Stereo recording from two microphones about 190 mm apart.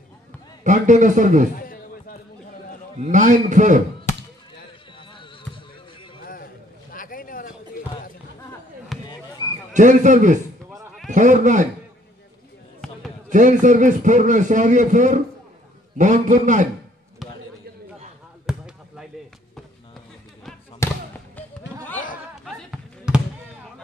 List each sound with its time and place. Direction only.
0.7 s a man's voice: 40° right (ahead or behind)
1.6 s a sound: 50° left (ahead or behind)
3.0 s a man's voice: 40° right (ahead or behind)
6.2 s a sound: 50° left (ahead or behind)
9.0 s basketball bounce: 25° left (ahead or behind)
9.8 s a man's voice: 40° right (ahead or behind)
13.3 s a man's voice: 40° right (ahead or behind)
18.5 s basketball bounce: 5° right (ahead or behind)
20.8 s basketball bounce: 15° left (ahead or behind)
22.4 s basketball bounce: 5° right (ahead or behind)